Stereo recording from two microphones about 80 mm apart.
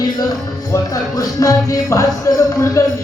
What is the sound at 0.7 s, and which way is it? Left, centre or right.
Music, left.